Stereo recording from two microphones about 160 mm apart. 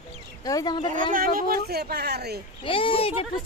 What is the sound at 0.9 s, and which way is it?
Speech, 60° right (ahead or behind).